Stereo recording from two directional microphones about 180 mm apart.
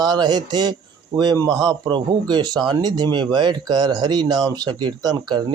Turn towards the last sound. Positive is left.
turn(degrees=-25)  # may be behind; listen again after turning